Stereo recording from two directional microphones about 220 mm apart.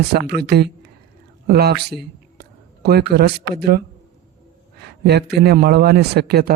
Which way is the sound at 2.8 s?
45° right (ahead or behind).